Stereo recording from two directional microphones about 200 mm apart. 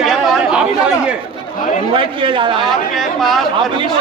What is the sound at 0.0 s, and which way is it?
Chatter, centre (ahead or behind).